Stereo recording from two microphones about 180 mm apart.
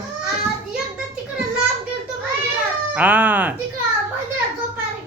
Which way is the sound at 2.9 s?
10° right (ahead or behind).